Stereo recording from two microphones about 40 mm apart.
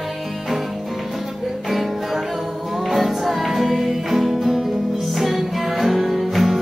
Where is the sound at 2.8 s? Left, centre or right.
Centre.